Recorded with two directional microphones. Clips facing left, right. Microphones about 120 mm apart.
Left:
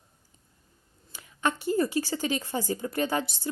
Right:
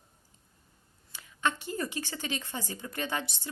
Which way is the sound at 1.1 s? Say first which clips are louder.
Left 3 dB; 40° left (ahead or behind).